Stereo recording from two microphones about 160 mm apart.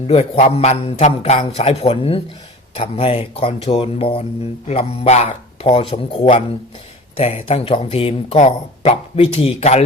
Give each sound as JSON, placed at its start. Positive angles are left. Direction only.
{"t": 0.1, "sound": "speech", "side_deg": 40}